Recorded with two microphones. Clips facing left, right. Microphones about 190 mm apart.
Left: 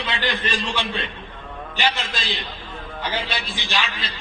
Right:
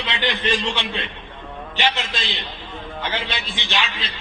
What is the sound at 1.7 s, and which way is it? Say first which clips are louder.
A man's voice: right 1 dB; 20° right (ahead or behind).